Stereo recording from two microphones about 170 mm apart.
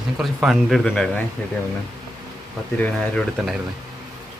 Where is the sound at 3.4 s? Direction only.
Centre (ahead or behind).